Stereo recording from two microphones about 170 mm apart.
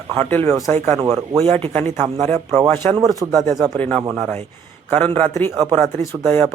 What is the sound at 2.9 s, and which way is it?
Speech, 25° right (ahead or behind).